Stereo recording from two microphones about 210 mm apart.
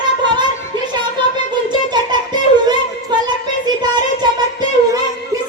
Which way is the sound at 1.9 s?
20° right (ahead or behind).